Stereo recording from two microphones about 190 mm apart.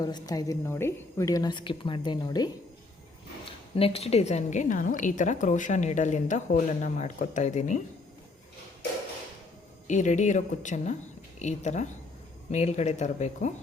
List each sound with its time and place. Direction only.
0.0 s a woman's voice: 20° left (ahead or behind)
3.8 s a woman's voice: 30° left (ahead or behind)
9.8 s a woman's voice: 40° left (ahead or behind)